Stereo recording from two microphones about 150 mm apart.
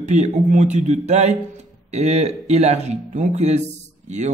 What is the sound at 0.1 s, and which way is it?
Speech, 50° right (ahead or behind).